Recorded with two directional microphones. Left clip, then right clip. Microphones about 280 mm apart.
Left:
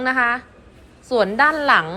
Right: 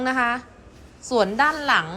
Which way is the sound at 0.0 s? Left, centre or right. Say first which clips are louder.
Left 4 dB; centre.